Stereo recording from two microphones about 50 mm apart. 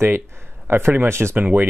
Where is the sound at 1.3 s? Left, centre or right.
Right.